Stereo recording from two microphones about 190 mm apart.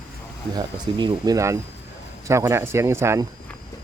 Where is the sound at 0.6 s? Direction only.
20° right (ahead or behind).